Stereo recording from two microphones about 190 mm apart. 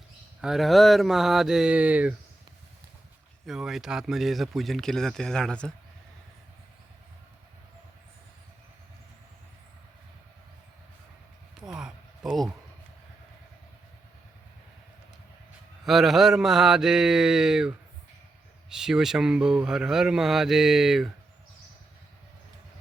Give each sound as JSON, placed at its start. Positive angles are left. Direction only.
{"t": 0.4, "sound": "speech", "side_deg": 0}
{"t": 3.4, "sound": "speech", "side_deg": 0}
{"t": 11.6, "sound": "a sound", "side_deg": -5}
{"t": 15.8, "sound": "speech", "side_deg": 0}